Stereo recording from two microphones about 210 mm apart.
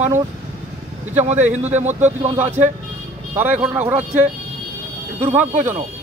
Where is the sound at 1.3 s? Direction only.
35° right (ahead or behind).